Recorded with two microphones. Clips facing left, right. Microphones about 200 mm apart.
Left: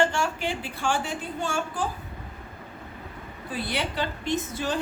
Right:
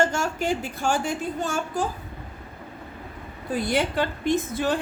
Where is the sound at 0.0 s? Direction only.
45° right (ahead or behind).